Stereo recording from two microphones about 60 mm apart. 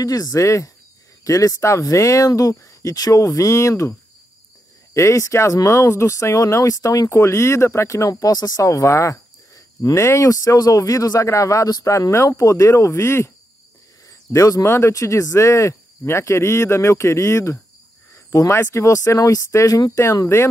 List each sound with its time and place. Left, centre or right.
0.0 s speech: left
1.2 s speech: left
4.9 s speech: left
14.3 s speech: left
18.1 s cricket: left
18.8 s speech: left